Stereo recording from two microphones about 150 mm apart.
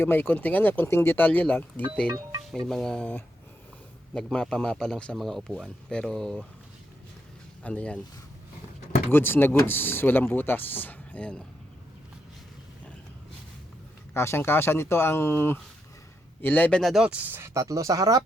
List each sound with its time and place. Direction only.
0.0 s speech: 15° left (ahead or behind)
2.0 s speech: 25° right (ahead or behind)
2.5 s a man's voice: 5° left (ahead or behind)
7.6 s speech: 10° left (ahead or behind)
9.0 s speech: 15° left (ahead or behind)
14.1 s speech: 15° left (ahead or behind); by 18.2 s 20° right (ahead or behind)